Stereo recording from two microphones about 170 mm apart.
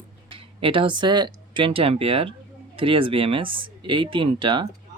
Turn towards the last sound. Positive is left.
turn(degrees=-30)  # may be behind; listen again after turning